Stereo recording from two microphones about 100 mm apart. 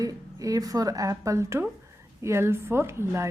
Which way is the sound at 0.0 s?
35° right (ahead or behind).